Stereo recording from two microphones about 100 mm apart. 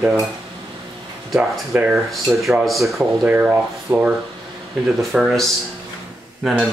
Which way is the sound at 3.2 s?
15° right (ahead or behind).